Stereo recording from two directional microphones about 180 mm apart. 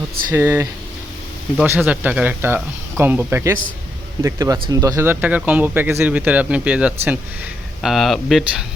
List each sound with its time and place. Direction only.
0.3 s speech: 15° right (ahead or behind)